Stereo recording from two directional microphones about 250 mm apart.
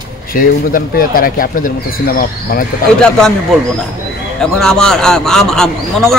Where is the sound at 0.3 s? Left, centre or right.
Left.